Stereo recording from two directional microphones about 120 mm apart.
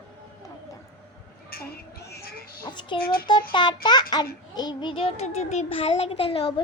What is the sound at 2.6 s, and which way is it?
A child's voice, 40° left (ahead or behind).